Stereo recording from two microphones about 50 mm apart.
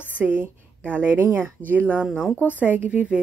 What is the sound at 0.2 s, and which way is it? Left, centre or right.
A woman's voice, right.